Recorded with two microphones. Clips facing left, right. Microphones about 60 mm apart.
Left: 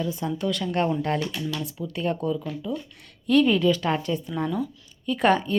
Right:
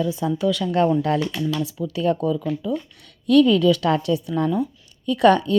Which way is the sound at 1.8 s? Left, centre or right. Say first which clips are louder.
Right 5 dB; right.